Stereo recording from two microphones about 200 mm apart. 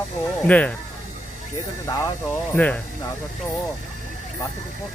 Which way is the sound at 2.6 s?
5° left (ahead or behind).